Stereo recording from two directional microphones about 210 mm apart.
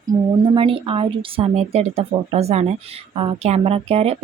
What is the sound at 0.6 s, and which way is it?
Speech, 25° right (ahead or behind).